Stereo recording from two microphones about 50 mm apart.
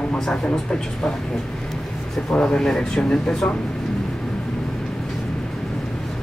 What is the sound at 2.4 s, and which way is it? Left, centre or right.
Speech, centre.